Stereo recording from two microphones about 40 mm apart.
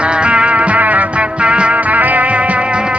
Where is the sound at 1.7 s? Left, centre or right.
Right.